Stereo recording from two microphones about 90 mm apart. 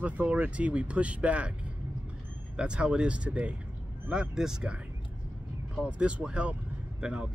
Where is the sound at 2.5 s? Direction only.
10° right (ahead or behind).